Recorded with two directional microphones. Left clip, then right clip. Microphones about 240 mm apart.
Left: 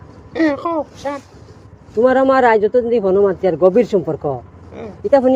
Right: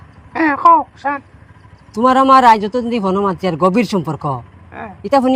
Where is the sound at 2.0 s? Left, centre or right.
Right.